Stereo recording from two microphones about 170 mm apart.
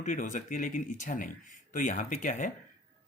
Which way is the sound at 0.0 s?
50° left (ahead or behind).